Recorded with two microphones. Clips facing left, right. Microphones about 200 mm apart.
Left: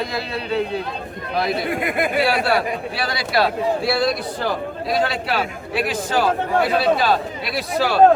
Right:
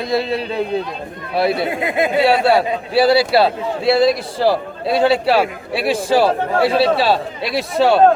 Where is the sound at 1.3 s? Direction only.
25° right (ahead or behind).